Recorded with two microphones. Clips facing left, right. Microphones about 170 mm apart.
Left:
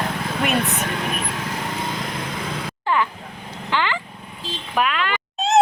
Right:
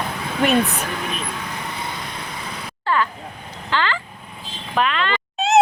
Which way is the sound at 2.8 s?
15° left (ahead or behind).